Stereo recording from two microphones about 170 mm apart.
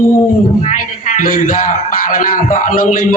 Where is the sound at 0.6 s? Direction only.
45° left (ahead or behind).